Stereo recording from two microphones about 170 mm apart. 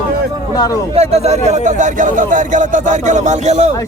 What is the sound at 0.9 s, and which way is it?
Speech, 40° right (ahead or behind).